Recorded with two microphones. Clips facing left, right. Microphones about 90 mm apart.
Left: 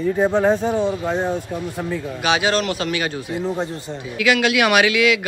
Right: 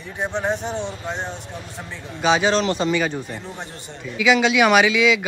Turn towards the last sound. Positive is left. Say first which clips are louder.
# even
turn(degrees=5)  # may be behind; listen again after turning